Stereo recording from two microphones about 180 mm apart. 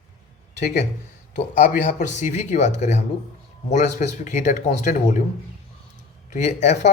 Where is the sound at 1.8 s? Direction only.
40° left (ahead or behind).